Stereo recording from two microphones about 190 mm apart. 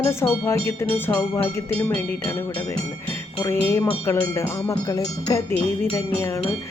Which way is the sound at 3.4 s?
15° left (ahead or behind).